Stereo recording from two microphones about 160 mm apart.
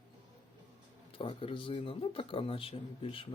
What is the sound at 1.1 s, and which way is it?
A man's voice, 35° left (ahead or behind).